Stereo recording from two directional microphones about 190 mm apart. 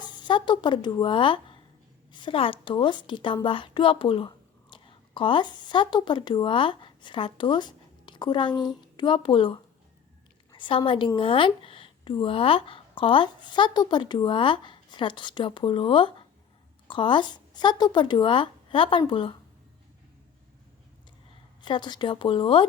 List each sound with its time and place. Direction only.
0.0 s a woman's voice: 25° left (ahead or behind)
21.6 s a woman's voice: 25° left (ahead or behind)